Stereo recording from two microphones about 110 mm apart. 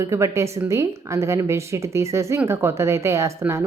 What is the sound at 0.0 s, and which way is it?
Speech, 25° right (ahead or behind).